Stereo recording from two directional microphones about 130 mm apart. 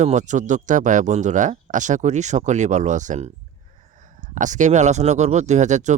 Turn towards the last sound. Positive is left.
turn(degrees=-65)  # may be behind; listen again after turning